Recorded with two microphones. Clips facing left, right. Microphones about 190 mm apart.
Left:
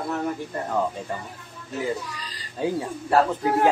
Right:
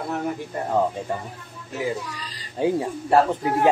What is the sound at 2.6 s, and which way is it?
Speech, 20° right (ahead or behind).